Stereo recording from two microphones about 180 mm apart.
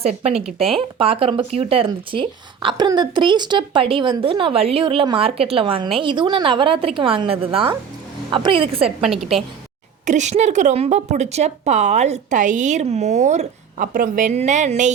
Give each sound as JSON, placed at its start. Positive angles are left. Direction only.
{"t": 0.0, "sound": "a woman's voice", "side_deg": -35}
{"t": 0.4, "sound": "a woman's voice", "side_deg": 0}
{"t": 0.8, "sound": "speech", "side_deg": -30}
{"t": 9.0, "sound": "a woman's voice", "side_deg": -5}
{"t": 10.1, "sound": "a woman's voice", "side_deg": -40}